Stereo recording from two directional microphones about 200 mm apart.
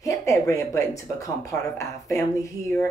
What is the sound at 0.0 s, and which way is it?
Speech, 15° left (ahead or behind).